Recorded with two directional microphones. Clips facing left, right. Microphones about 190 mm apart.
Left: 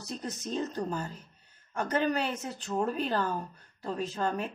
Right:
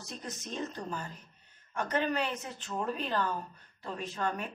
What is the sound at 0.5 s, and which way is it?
A woman's voice, 35° left (ahead or behind).